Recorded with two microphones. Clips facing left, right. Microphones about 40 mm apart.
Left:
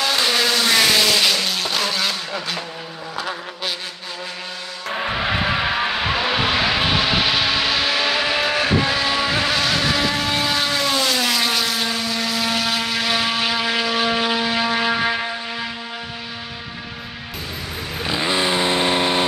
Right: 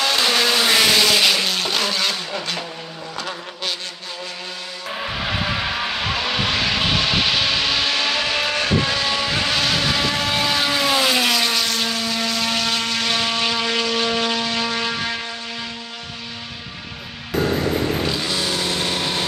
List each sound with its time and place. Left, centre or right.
0.0 s vehicle: centre
4.9 s vehicle: centre
11.3 s vehicle: centre
17.4 s music: right
18.0 s vehicle: left